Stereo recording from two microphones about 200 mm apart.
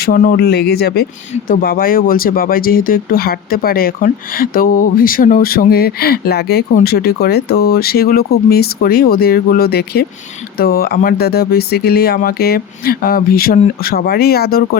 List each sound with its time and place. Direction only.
0.0 s speech: 45° left (ahead or behind)